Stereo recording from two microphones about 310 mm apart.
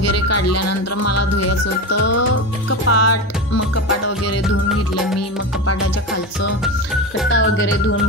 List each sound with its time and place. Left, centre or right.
0.0 s speech: left
1.9 s music: left
7.2 s speech: left